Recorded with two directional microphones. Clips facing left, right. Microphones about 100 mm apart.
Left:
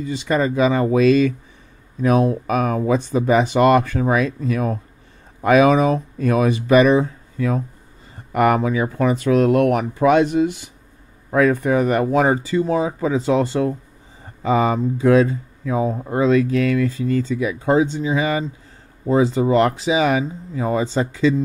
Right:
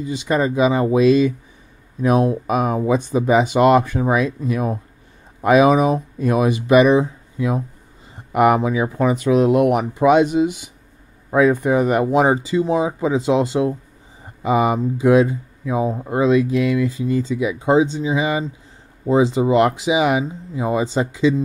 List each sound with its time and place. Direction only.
0.0 s speech: 20° right (ahead or behind)